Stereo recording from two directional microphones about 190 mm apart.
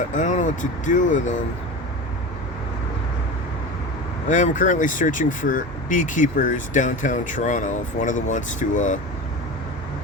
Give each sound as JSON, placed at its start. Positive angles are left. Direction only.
{"t": 0.1, "sound": "speech", "side_deg": 40}
{"t": 4.3, "sound": "speech", "side_deg": 40}